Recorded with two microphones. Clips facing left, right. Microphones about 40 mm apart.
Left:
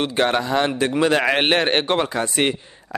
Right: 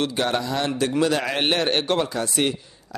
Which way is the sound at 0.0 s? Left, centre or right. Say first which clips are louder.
Left 4 dB; left.